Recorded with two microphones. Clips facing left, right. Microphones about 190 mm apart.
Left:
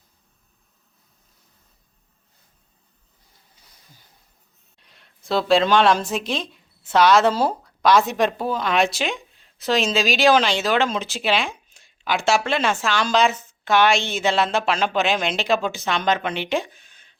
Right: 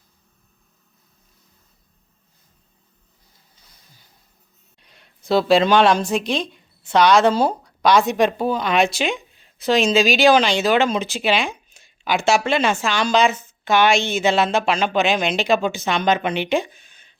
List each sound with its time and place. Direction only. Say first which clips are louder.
4.8 s a woman's voice: right 2 dB; centre (ahead or behind)